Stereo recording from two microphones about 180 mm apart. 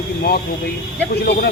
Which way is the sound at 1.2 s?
65° left (ahead or behind).